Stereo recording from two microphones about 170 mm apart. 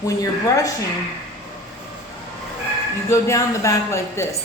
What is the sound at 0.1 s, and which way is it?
Speech, 20° left (ahead or behind).